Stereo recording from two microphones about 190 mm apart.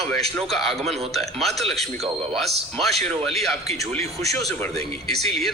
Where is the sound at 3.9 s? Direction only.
15° left (ahead or behind).